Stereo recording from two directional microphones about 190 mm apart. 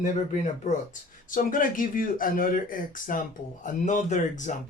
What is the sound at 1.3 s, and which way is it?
Speech, 45° left (ahead or behind).